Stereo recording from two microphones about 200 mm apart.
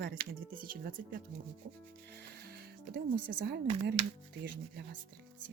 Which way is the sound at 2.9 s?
55° right (ahead or behind).